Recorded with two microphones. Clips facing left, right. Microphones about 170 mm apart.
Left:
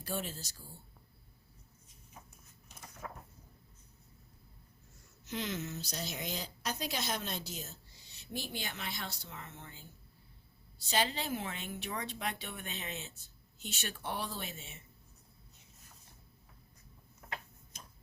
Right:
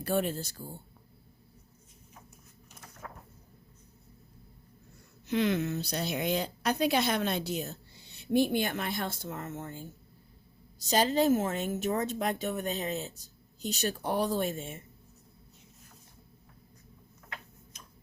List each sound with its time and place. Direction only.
0.0 s a woman's voice: 60° right (ahead or behind)
3.0 s a sound: 5° left (ahead or behind)
5.2 s a woman's voice: 60° right (ahead or behind)